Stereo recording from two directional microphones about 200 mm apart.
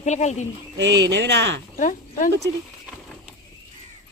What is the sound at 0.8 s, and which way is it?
Speech, 60° right (ahead or behind).